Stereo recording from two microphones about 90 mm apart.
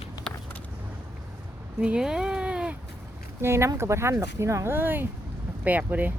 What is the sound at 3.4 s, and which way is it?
Speech, 30° right (ahead or behind).